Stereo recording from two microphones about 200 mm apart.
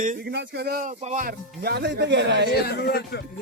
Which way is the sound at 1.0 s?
35° right (ahead or behind).